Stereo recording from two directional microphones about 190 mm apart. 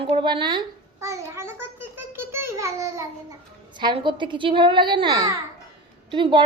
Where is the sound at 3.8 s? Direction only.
25° right (ahead or behind).